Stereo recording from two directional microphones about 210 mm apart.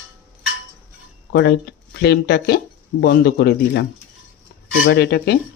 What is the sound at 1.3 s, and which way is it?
Speech, 50° left (ahead or behind).